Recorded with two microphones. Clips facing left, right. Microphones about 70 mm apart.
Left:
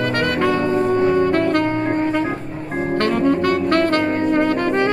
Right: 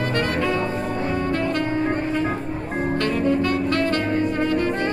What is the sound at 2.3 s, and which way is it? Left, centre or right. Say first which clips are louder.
Organ: left 1 dB; centre.